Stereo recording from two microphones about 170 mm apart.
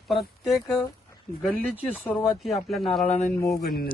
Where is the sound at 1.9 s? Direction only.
10° left (ahead or behind).